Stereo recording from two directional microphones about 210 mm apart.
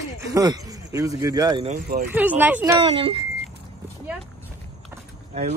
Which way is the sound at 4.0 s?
5° right (ahead or behind).